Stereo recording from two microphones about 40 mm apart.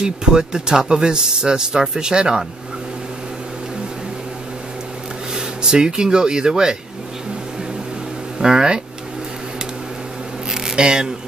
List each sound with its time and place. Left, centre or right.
0.0 s speech: centre
5.3 s speech: centre
8.4 s speech: centre
10.5 s a sound: centre